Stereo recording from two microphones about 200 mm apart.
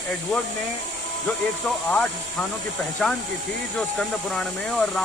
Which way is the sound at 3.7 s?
5° left (ahead or behind).